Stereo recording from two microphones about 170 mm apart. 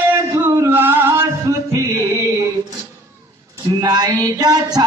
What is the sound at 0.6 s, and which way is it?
Music, 10° right (ahead or behind).